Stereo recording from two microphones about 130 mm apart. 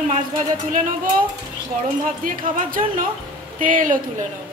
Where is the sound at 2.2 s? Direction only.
90° right.